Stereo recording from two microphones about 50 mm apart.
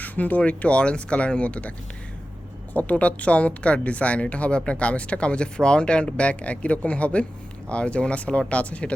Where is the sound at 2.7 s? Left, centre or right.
Left.